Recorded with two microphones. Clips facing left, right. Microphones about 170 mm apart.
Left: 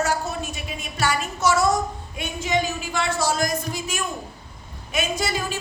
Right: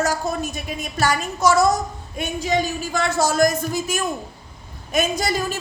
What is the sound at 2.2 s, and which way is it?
A woman's voice, 40° right (ahead or behind).